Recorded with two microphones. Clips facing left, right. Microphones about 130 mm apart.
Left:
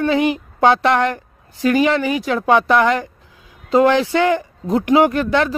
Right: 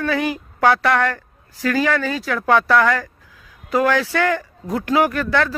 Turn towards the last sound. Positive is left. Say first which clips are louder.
# left 3 dB
turn(degrees=20)  # may be behind; listen again after turning